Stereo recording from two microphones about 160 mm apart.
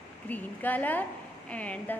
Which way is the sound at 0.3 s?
10° left (ahead or behind).